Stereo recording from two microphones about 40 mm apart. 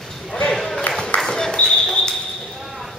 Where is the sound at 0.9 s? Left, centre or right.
Left.